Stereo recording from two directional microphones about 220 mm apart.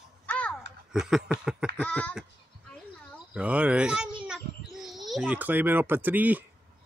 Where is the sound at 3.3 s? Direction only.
5° right (ahead or behind).